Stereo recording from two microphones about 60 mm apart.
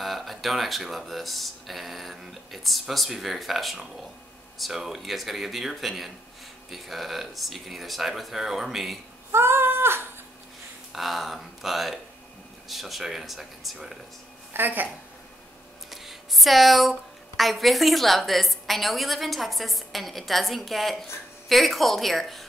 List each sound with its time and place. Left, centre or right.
0.0 s speech: centre
9.3 s cat: right
10.9 s speech: centre
14.5 s speech: right
15.9 s a sound: centre
17.4 s speech: centre